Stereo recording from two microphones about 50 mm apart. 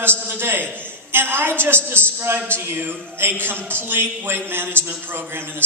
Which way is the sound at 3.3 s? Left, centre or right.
Right.